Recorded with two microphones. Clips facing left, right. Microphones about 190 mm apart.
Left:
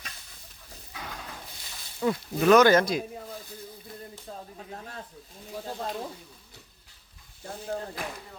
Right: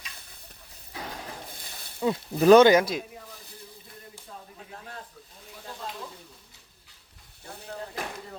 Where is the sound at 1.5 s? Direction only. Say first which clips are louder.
Right 2 dB; 55° right (ahead or behind).